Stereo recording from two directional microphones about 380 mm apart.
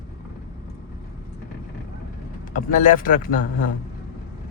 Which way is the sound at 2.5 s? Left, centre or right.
Left.